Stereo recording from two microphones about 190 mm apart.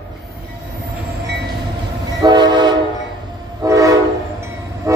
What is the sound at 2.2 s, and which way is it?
Train, 20° right (ahead or behind).